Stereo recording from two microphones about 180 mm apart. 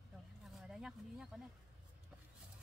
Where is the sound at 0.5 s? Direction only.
Centre (ahead or behind).